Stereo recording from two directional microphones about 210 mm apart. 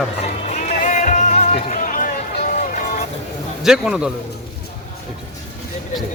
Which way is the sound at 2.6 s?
35° left (ahead or behind).